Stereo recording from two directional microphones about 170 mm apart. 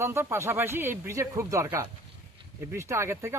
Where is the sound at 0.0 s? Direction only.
15° right (ahead or behind).